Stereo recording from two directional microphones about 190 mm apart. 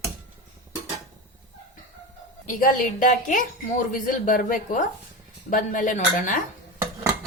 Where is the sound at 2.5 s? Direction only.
45° left (ahead or behind).